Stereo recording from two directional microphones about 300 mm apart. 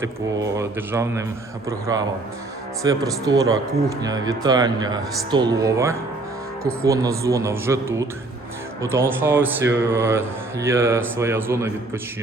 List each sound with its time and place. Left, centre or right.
0.4 s speech: centre